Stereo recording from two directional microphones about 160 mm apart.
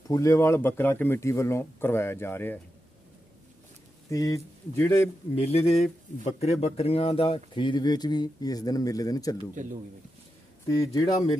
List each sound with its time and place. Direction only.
0.1 s speech: 20° left (ahead or behind)
4.1 s speech: 20° left (ahead or behind)
5.3 s speech: 40° left (ahead or behind); by 9.4 s 20° left (ahead or behind)
10.8 s speech: 20° left (ahead or behind)